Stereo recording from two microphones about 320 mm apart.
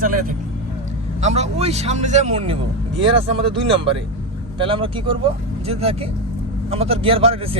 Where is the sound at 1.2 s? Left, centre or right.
Centre.